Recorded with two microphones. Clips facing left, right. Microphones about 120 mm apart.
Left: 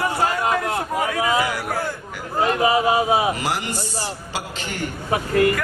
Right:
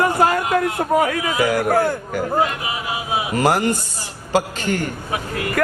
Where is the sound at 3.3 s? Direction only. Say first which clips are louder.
Right 8 dB; 45° right (ahead or behind).